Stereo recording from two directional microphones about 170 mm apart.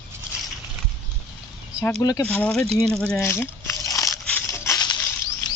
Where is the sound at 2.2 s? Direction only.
10° left (ahead or behind).